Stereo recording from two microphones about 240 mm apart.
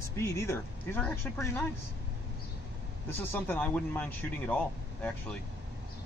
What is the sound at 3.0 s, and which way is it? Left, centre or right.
Speech, centre.